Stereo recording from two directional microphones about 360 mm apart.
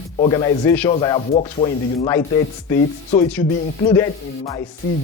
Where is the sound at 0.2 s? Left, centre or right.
Centre.